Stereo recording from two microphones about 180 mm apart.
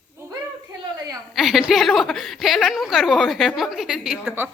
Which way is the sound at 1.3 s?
Centre (ahead or behind).